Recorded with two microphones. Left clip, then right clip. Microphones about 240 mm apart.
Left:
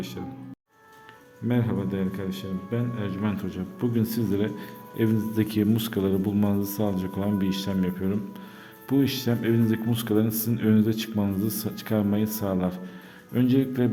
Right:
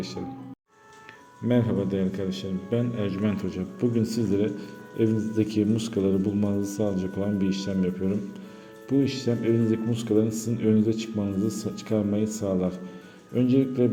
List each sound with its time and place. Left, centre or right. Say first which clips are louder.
1.5 s a man's voice: right 3 dB; centre; by 13.9 s left